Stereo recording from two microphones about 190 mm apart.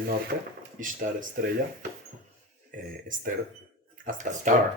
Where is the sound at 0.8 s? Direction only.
50° right (ahead or behind).